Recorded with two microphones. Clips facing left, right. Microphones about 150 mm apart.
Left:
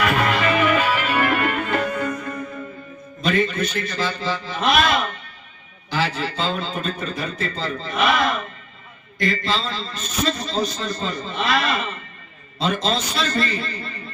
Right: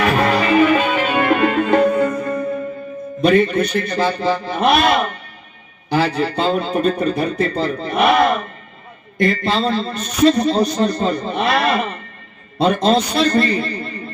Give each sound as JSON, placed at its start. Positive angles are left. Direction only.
{"t": 0.0, "sound": "music", "side_deg": -35}
{"t": 3.2, "sound": "a man's voice", "side_deg": -60}